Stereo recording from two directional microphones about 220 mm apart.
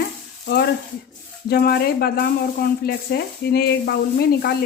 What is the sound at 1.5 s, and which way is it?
Speech, 45° left (ahead or behind).